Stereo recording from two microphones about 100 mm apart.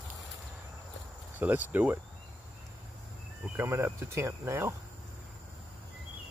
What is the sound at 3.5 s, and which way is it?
Speech, 25° right (ahead or behind).